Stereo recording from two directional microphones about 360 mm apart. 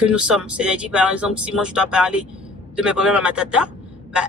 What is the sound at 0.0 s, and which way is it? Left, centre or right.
A man's voice, centre.